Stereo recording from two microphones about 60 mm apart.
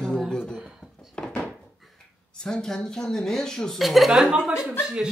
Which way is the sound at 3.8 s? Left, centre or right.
Centre.